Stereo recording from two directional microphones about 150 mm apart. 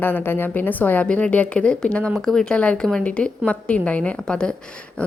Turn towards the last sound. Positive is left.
turn(degrees=10)  # may be behind; listen again after turning